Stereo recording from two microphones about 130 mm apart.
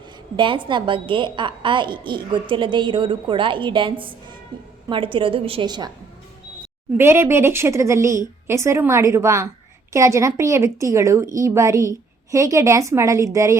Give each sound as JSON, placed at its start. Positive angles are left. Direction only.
{"t": 0.3, "sound": "a woman's voice", "side_deg": -40}
{"t": 6.9, "sound": "a woman's voice", "side_deg": -20}